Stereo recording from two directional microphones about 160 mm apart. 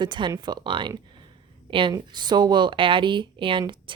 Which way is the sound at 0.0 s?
30° right (ahead or behind).